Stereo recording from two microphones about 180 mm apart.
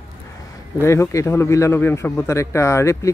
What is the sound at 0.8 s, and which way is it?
A man's voice, 15° left (ahead or behind).